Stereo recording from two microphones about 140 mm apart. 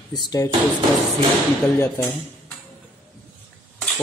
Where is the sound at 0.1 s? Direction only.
30° left (ahead or behind).